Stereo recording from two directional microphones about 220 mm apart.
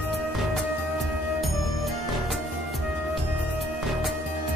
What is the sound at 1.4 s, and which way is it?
Music, centre (ahead or behind).